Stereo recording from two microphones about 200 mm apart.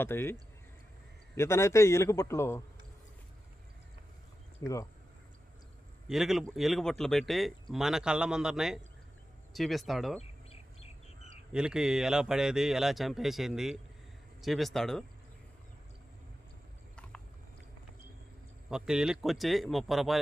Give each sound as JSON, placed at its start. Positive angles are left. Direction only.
{"t": 0.0, "sound": "a man's voice", "side_deg": 10}
{"t": 1.4, "sound": "a man's voice", "side_deg": 15}
{"t": 4.6, "sound": "a man's voice", "side_deg": 15}
{"t": 6.1, "sound": "speech", "side_deg": 0}
{"t": 11.5, "sound": "speech", "side_deg": -5}
{"t": 18.7, "sound": "speech", "side_deg": -5}